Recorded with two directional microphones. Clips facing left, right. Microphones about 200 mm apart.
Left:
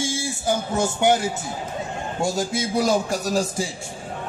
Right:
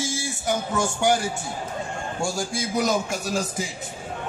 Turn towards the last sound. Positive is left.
turn(degrees=35)  # may be behind; listen again after turning